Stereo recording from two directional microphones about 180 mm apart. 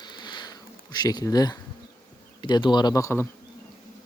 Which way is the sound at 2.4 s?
25° left (ahead or behind).